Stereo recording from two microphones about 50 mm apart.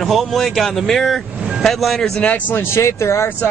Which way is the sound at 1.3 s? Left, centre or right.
Centre.